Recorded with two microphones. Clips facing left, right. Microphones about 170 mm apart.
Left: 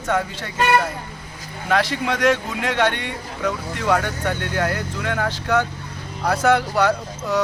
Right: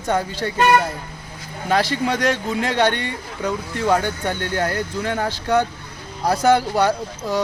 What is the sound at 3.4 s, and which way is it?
Speech, 30° right (ahead or behind).